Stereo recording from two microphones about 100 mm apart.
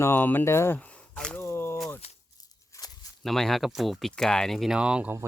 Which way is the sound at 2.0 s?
90° left.